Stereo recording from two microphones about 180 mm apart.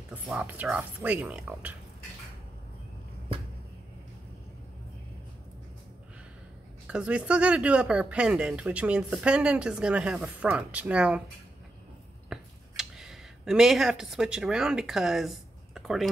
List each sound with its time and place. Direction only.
0.1 s speech: 10° right (ahead or behind)
6.9 s speech: 5° right (ahead or behind)
12.3 s a sound: 5° right (ahead or behind)